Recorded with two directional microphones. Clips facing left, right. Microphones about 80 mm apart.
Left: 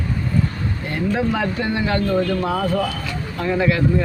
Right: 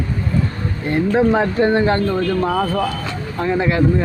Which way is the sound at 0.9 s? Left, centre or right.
Right.